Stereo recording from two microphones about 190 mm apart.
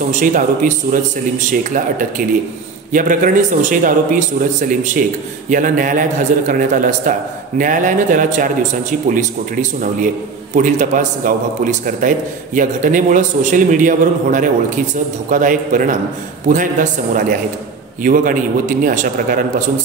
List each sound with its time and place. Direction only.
0.1 s a man's voice: 45° right (ahead or behind)